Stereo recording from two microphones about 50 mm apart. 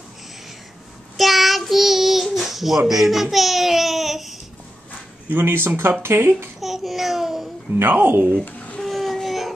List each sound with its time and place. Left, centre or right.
1.1 s child singing: centre
2.4 s babbling: centre
2.9 s speech: centre
5.3 s speech: right
6.6 s babbling: centre
7.8 s speech: right
8.8 s a sound: centre